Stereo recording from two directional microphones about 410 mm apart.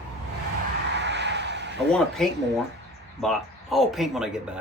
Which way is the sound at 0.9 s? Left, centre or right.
Right.